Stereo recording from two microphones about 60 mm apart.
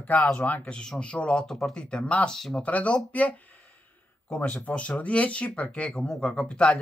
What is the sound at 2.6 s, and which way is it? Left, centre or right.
Speech, left.